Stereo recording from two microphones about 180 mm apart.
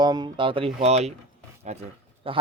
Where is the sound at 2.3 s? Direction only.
30° right (ahead or behind).